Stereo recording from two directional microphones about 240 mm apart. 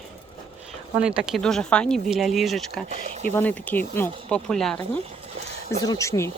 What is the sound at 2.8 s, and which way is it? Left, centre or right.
Speech, right.